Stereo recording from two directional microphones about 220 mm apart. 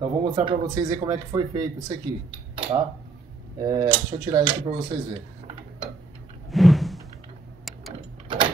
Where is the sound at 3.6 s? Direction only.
15° right (ahead or behind).